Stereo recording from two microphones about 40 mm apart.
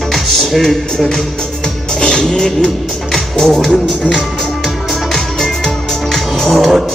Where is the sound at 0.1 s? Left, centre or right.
Centre.